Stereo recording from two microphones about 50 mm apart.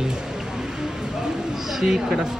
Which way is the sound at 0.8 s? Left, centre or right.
Centre.